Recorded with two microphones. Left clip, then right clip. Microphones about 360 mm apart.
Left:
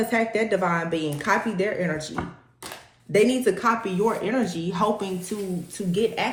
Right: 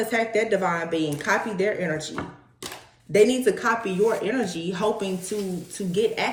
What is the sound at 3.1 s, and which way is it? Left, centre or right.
Speech, centre.